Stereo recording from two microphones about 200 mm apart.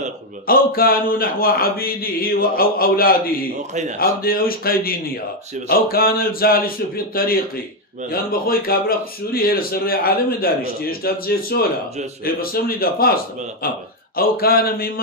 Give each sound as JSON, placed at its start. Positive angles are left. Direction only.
{"t": 0.5, "sound": "speech", "side_deg": 45}